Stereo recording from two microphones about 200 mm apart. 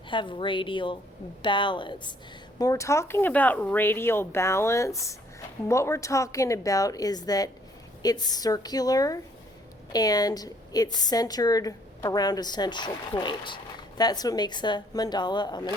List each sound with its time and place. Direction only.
0.1 s a woman's voice: 25° left (ahead or behind)